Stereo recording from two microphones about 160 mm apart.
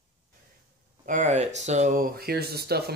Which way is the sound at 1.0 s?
50° right (ahead or behind).